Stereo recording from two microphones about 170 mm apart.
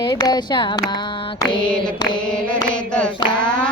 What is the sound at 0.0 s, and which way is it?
Mantra, 25° left (ahead or behind).